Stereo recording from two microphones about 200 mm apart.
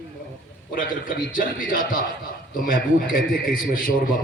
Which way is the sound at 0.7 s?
45° left (ahead or behind).